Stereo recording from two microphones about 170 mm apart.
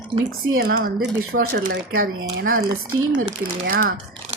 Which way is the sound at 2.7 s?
25° right (ahead or behind).